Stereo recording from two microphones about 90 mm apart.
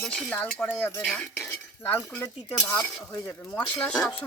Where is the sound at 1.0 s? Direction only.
5° left (ahead or behind).